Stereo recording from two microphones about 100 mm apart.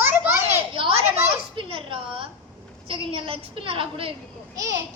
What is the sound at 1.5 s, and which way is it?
A child's voice, 60° right (ahead or behind).